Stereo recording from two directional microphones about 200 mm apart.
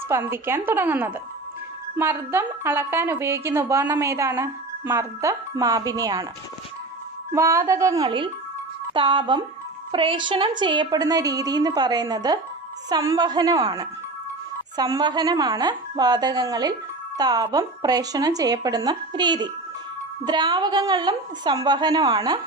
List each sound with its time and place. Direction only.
0.1 s a woman's voice: 10° right (ahead or behind)
7.3 s a woman's voice: 15° right (ahead or behind)